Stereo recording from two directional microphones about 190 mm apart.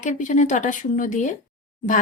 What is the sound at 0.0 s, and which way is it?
A woman's voice, 40° left (ahead or behind).